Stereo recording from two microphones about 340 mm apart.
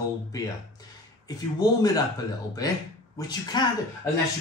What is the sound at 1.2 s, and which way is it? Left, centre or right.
Speech, centre.